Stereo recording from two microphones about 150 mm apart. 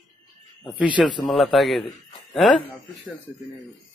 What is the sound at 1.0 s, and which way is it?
Speech, centre (ahead or behind).